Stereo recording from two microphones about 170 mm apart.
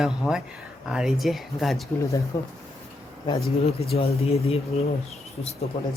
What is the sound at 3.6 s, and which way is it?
Speech, 35° left (ahead or behind).